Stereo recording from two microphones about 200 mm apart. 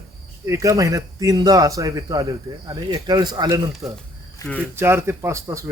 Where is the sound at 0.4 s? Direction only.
15° right (ahead or behind).